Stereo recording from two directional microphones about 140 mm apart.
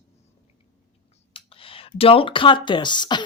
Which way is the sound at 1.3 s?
40° left (ahead or behind).